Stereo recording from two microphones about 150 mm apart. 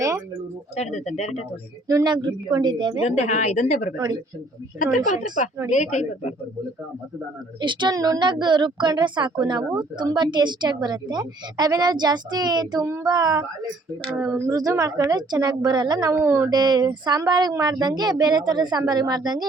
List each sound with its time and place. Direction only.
0.8 s speech: 50° left (ahead or behind)
1.9 s a woman's voice: 25° right (ahead or behind)
3.0 s speech: 50° left (ahead or behind)
3.9 s a woman's voice: 30° right (ahead or behind)
4.8 s speech: 55° left (ahead or behind)
7.6 s a woman's voice: 30° right (ahead or behind)